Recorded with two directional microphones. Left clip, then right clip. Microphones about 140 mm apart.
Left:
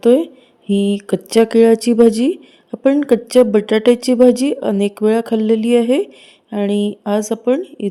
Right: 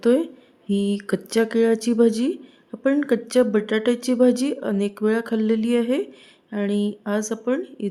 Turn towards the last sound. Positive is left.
turn(degrees=30)  # may be behind; listen again after turning